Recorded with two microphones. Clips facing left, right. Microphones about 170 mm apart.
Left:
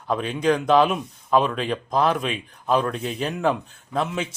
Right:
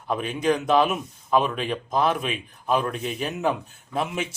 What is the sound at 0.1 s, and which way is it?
Speech, 5° right (ahead or behind).